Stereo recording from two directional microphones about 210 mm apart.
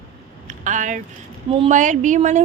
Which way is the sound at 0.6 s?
35° right (ahead or behind).